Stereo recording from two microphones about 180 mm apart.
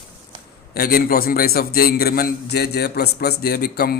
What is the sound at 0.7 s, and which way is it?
Speech, 60° left (ahead or behind).